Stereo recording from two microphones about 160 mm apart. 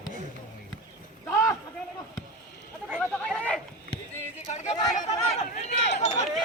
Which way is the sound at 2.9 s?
5° left (ahead or behind).